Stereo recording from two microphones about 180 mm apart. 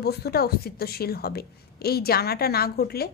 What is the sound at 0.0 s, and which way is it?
A woman's voice, 60° left (ahead or behind).